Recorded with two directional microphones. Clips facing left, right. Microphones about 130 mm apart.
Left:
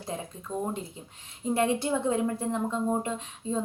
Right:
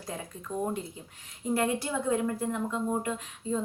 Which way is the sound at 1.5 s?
25° left (ahead or behind).